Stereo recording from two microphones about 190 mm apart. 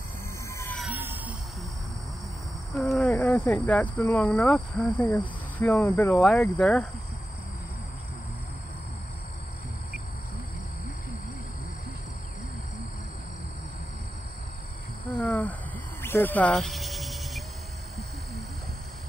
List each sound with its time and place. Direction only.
0.5 s music: 15° left (ahead or behind)
0.7 s music: 10° right (ahead or behind)
2.7 s a sound: centre (ahead or behind)
3.2 s speech: 10° left (ahead or behind)
15.1 s a sound: 10° left (ahead or behind)
16.0 s cricket: 10° left (ahead or behind)